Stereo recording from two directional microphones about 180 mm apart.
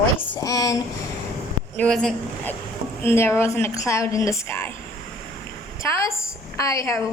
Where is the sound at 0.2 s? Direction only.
15° left (ahead or behind).